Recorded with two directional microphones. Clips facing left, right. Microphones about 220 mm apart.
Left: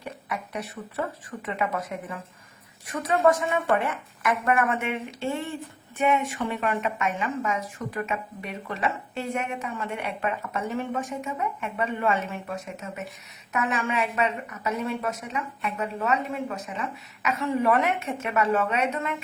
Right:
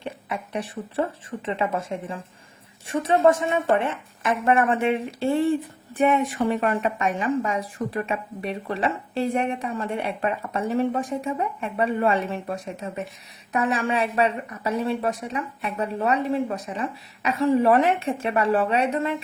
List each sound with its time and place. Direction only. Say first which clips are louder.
0.0 s a woman's voice: right 3 dB; 25° right (ahead or behind)